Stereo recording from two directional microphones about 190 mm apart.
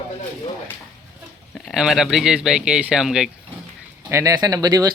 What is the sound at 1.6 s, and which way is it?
Speech, 5° right (ahead or behind).